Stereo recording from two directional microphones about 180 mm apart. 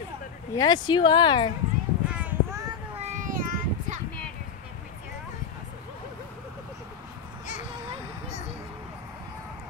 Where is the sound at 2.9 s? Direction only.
40° right (ahead or behind).